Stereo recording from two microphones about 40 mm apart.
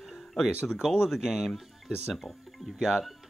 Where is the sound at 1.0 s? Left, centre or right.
Centre.